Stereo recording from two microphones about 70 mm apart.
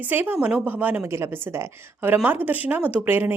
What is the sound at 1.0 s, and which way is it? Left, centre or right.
A woman's voice, right.